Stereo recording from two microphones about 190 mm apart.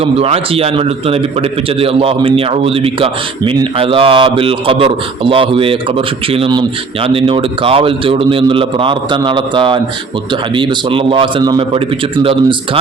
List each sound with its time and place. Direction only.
0.0 s a man's voice: 30° right (ahead or behind)